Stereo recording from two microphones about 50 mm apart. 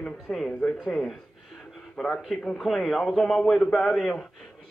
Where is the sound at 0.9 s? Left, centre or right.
Centre.